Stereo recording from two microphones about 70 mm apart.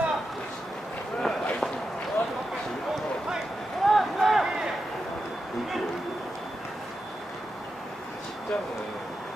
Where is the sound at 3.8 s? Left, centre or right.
Centre.